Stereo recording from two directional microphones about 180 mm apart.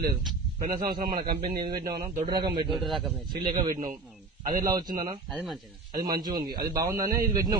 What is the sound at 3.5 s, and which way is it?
A man's voice, 25° right (ahead or behind).